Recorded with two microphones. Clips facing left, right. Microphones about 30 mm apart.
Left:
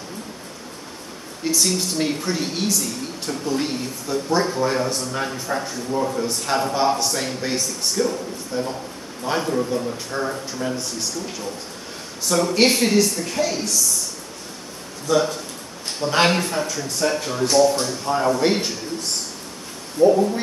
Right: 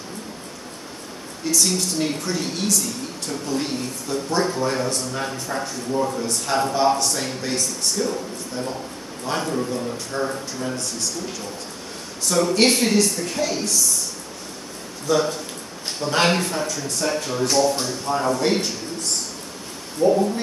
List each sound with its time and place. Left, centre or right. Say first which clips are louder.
1.4 s speech: even; centre
12.3 s speech: even; centre
15.0 s speech: left 1 dB; centre
20.0 s speech: left 3 dB; centre